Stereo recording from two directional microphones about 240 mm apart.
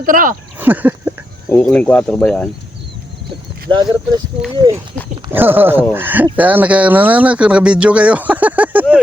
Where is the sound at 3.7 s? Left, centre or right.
Centre.